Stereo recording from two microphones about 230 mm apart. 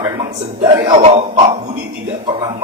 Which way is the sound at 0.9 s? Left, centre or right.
Right.